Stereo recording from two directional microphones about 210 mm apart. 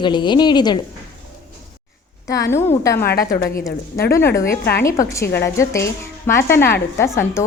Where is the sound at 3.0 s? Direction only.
45° left (ahead or behind).